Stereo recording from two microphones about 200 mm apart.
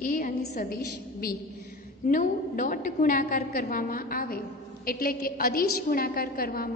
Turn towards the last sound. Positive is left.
turn(degrees=45)  # may be behind; listen again after turning